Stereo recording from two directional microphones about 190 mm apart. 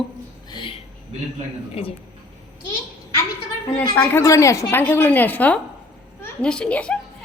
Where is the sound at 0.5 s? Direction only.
25° left (ahead or behind).